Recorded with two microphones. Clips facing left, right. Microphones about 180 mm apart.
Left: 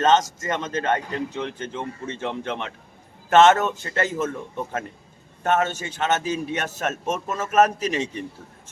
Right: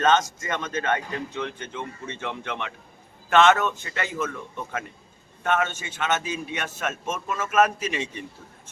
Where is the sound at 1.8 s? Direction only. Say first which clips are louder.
Left 3 dB; 40° left (ahead or behind).